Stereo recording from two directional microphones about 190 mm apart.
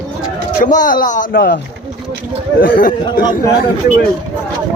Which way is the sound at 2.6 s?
50° left (ahead or behind).